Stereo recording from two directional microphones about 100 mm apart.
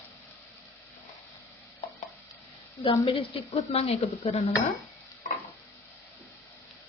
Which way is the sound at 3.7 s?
85° left.